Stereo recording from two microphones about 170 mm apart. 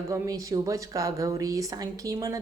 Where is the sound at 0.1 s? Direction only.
20° right (ahead or behind).